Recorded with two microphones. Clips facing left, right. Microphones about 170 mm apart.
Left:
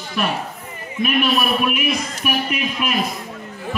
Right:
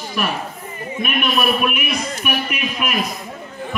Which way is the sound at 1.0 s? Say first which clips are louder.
Left 1 dB; 35° left (ahead or behind).